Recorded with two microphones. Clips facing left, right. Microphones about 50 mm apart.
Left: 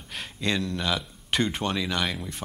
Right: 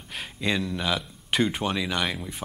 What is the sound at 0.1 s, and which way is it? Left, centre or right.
Speech, centre.